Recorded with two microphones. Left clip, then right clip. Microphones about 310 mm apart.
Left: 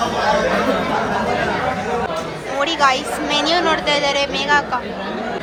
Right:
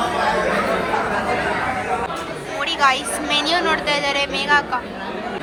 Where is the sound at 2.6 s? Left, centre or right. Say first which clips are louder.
Left 2 dB; centre.